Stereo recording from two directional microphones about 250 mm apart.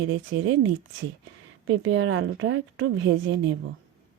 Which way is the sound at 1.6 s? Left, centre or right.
Right.